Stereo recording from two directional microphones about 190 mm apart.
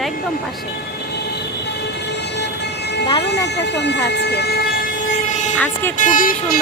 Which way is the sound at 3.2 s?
65° left (ahead or behind).